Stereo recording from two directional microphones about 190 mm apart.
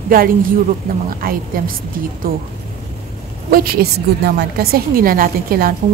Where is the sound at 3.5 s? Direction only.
50° right (ahead or behind).